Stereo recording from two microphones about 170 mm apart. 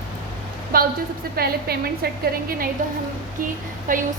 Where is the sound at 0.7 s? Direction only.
60° right (ahead or behind).